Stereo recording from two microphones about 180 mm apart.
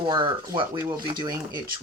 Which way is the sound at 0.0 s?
25° right (ahead or behind).